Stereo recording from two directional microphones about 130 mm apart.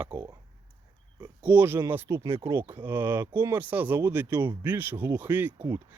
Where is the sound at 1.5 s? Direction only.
15° right (ahead or behind).